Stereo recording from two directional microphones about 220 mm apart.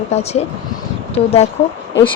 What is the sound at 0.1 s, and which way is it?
Speech, 30° left (ahead or behind).